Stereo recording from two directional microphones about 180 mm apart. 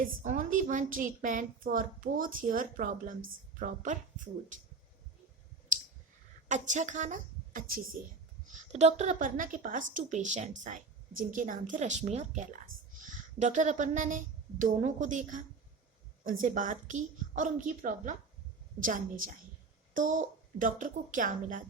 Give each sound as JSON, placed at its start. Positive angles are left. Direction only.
{"t": 0.0, "sound": "a woman's voice", "side_deg": -45}
{"t": 6.5, "sound": "a woman's voice", "side_deg": -40}